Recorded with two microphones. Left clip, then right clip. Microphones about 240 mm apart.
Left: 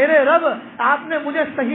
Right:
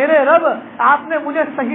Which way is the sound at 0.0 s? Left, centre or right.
Left.